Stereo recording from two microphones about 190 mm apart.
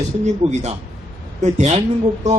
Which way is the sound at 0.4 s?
35° right (ahead or behind).